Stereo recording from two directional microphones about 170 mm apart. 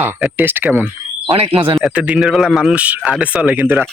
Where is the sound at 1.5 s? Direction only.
35° right (ahead or behind).